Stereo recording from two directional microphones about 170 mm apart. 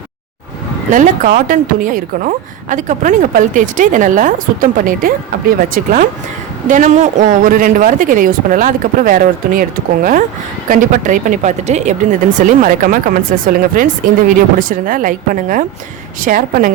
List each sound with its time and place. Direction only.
0.9 s a woman's voice: 50° right (ahead or behind)